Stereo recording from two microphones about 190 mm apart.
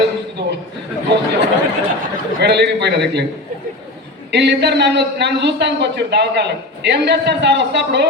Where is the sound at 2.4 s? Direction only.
60° right (ahead or behind).